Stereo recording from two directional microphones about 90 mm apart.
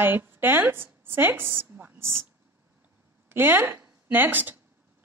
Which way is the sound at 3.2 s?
25° right (ahead or behind).